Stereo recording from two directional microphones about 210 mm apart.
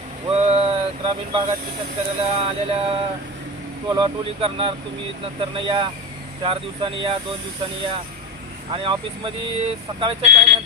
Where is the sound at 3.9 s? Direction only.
25° right (ahead or behind).